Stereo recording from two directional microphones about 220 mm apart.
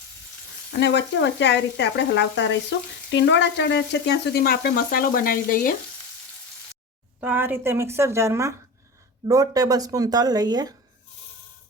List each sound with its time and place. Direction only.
0.7 s speech: 50° left (ahead or behind)
7.2 s speech: 10° right (ahead or behind)